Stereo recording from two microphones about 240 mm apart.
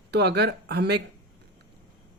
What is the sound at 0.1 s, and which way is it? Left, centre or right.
Speech, right.